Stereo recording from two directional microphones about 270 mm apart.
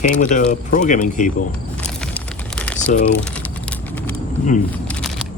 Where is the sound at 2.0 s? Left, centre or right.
Centre.